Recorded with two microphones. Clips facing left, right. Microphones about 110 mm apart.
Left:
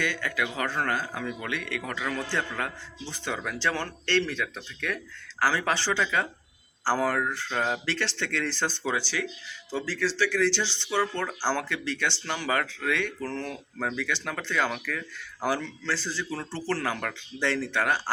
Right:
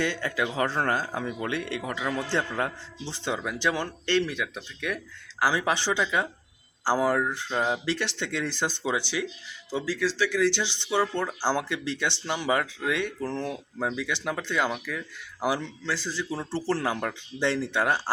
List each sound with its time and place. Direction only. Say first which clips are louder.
0.0 s speech: right 2 dB; 30° right (ahead or behind)